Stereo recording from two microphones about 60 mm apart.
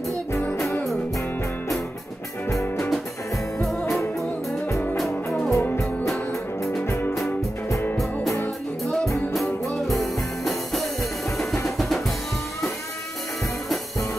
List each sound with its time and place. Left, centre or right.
3.9 s music: centre
5.5 s music: left
8.0 s music: centre